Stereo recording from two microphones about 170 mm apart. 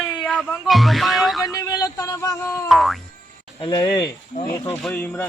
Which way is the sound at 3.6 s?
25° left (ahead or behind).